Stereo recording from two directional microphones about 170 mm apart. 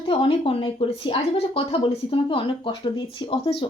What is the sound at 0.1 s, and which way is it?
A woman's voice, 30° left (ahead or behind).